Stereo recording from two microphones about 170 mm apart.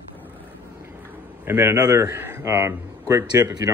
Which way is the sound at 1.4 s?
15° right (ahead or behind).